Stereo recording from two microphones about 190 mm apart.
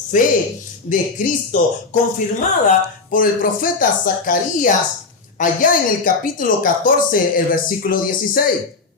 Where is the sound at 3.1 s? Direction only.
50° left (ahead or behind).